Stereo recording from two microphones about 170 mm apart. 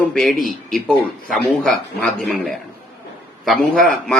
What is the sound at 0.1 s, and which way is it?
A man's voice, 5° left (ahead or behind).